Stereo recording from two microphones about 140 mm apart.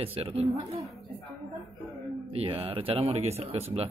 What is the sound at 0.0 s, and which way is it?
Speech, 45° right (ahead or behind).